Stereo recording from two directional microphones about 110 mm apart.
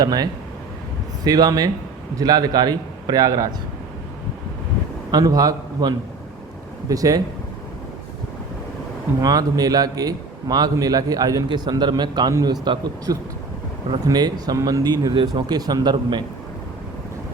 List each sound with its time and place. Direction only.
0.0 s a man's voice: 35° right (ahead or behind)
5.1 s a man's voice: 35° right (ahead or behind)
9.2 s a man's voice: 35° right (ahead or behind)
12.3 s a man's voice: 30° right (ahead or behind)
12.6 s a man's voice: 40° right (ahead or behind)